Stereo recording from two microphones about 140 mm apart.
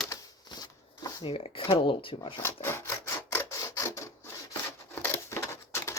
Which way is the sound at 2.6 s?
20° left (ahead or behind).